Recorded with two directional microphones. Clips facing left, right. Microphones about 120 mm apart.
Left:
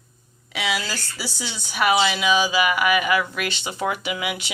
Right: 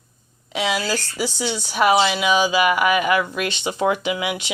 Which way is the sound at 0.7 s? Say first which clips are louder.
Right 4 dB; 15° right (ahead or behind).